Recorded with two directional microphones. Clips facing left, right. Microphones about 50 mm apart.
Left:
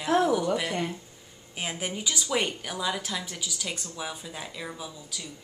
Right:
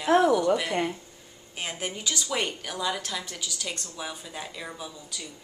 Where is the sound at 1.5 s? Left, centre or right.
Centre.